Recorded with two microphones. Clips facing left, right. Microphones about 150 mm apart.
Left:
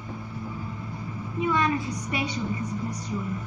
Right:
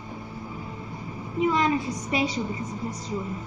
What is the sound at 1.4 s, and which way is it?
A woman's voice, 25° right (ahead or behind).